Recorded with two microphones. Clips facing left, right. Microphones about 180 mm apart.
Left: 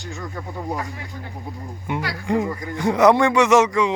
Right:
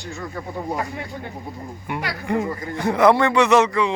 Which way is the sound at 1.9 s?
20° left (ahead or behind).